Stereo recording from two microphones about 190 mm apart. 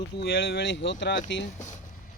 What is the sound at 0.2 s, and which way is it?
Speech, 60° left (ahead or behind).